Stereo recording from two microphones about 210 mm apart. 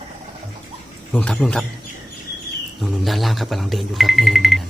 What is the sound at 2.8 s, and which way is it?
Speech, centre (ahead or behind).